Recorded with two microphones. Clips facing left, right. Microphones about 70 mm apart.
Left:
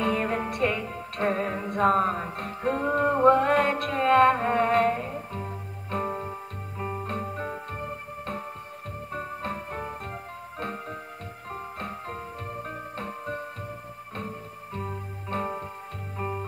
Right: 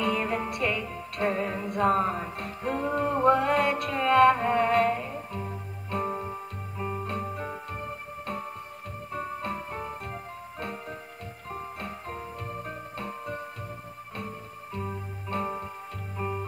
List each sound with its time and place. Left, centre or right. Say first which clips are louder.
0.0 s music: left 1 dB; left
6.0 s organ: even; centre
6.8 s music: even; left
9.1 s music: even; left